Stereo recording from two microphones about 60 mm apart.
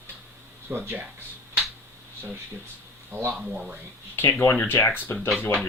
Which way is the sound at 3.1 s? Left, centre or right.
Right.